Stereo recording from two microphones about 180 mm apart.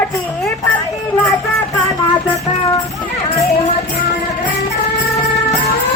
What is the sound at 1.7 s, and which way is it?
Music, 20° left (ahead or behind).